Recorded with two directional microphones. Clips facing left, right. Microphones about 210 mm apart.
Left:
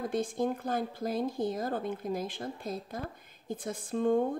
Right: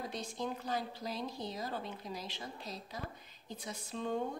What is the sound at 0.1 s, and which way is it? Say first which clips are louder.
Speech: left 9 dB; 50° left (ahead or behind).